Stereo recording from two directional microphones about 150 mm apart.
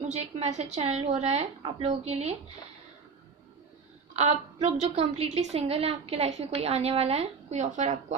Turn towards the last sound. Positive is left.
turn(degrees=-50)  # may be behind; listen again after turning